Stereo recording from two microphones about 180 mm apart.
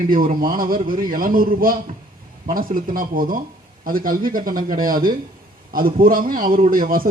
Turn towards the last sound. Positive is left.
turn(degrees=-55)  # may be behind; listen again after turning